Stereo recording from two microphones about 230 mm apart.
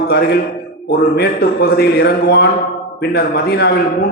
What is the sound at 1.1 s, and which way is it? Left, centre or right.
A man's voice, left.